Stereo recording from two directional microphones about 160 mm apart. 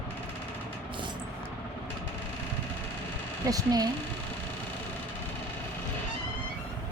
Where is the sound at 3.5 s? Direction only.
25° right (ahead or behind).